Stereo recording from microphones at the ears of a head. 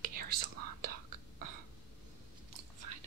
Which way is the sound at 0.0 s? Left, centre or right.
Right.